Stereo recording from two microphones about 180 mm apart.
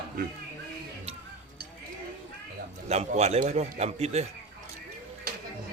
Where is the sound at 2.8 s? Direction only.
35° right (ahead or behind).